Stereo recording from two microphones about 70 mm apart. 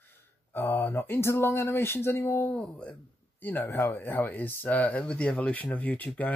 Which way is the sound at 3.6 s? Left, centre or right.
Left.